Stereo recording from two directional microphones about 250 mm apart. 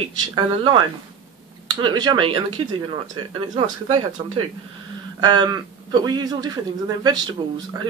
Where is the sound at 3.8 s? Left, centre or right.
Centre.